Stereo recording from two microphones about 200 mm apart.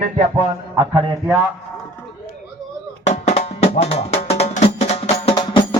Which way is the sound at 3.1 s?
30° left (ahead or behind).